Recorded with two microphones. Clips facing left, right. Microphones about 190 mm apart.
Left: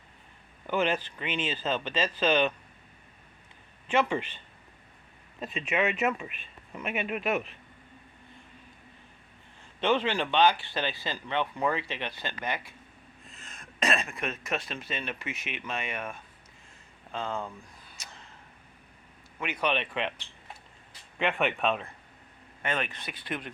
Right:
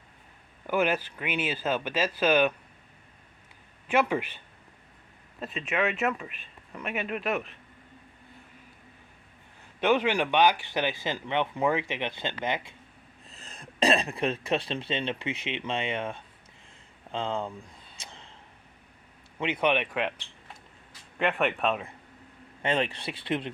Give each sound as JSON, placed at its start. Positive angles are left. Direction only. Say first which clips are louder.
{"t": 0.7, "sound": "speech", "louder": "right 2 dB", "side_deg": -10}
{"t": 3.8, "sound": "speech", "louder": "right 1 dB", "side_deg": -10}
{"t": 5.6, "sound": "speech", "louder": "even", "side_deg": 0}
{"t": 9.8, "sound": "speech", "louder": "right 2 dB", "side_deg": -15}
{"t": 13.3, "sound": "speech", "louder": "right 5 dB", "side_deg": -35}
{"t": 17.1, "sound": "a sound", "louder": "right 3 dB", "side_deg": -20}
{"t": 19.4, "sound": "speech", "louder": "right 4 dB", "side_deg": -25}
{"t": 19.7, "sound": "speech", "louder": "right 3 dB", "side_deg": -10}
{"t": 21.2, "sound": "speech", "louder": "right 1 dB", "side_deg": 0}
{"t": 22.6, "sound": "speech", "louder": "right 5 dB", "side_deg": -30}